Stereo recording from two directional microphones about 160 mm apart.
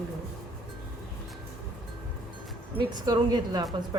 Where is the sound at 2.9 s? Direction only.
25° right (ahead or behind).